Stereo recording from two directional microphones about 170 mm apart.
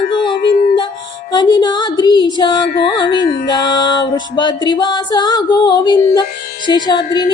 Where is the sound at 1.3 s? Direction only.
25° left (ahead or behind).